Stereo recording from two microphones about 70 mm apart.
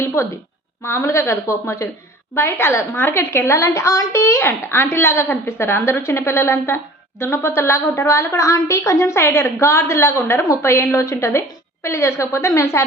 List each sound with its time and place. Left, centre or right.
0.0 s a woman's voice: left